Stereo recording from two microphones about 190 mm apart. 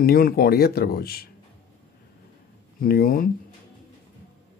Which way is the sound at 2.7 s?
50° left (ahead or behind).